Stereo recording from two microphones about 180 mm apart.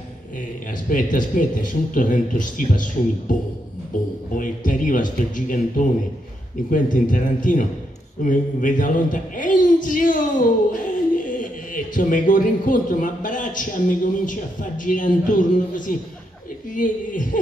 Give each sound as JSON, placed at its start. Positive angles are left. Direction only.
{"t": 0.4, "sound": "a man's voice", "side_deg": 50}